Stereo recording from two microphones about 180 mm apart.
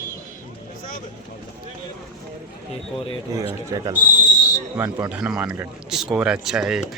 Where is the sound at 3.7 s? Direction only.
20° right (ahead or behind); by 6.8 s 5° right (ahead or behind).